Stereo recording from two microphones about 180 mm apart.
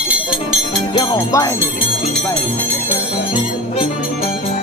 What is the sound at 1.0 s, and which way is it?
Music, 20° left (ahead or behind).